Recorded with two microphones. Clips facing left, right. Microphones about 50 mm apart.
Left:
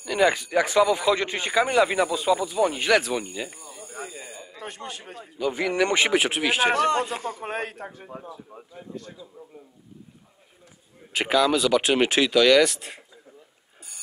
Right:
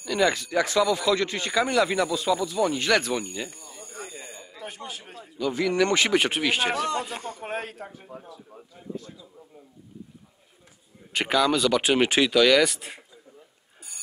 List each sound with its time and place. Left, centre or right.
0.0 s speech: centre
4.6 s speech: left
5.2 s speech: centre
6.1 s speech: centre
7.5 s speech: left
11.1 s speech: centre